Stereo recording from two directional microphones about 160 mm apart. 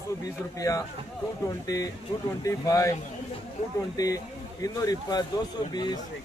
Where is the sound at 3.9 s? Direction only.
20° left (ahead or behind).